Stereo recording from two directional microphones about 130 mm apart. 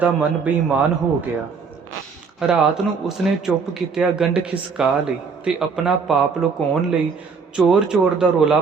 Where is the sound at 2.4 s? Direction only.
5° right (ahead or behind).